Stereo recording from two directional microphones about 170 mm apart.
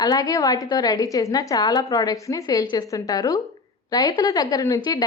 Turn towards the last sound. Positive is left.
turn(degrees=20)  # may be behind; listen again after turning